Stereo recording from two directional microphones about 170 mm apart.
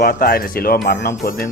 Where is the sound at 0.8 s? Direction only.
90° left.